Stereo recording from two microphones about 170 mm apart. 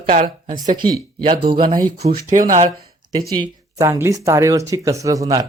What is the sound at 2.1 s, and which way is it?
Speech, 50° right (ahead or behind).